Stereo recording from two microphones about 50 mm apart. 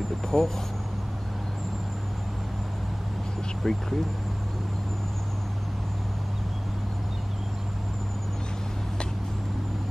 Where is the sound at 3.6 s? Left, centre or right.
Centre.